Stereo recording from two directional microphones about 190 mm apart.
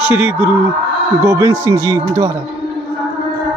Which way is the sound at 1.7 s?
15° right (ahead or behind).